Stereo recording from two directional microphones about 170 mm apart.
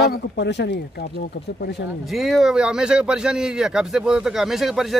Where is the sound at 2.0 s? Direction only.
Centre (ahead or behind).